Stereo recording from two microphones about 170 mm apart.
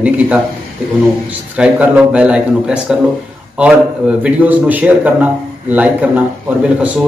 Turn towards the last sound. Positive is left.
turn(degrees=-10)  # may be behind; listen again after turning